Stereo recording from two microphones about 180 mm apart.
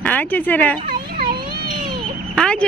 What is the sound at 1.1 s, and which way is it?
Children playing, 55° right (ahead or behind).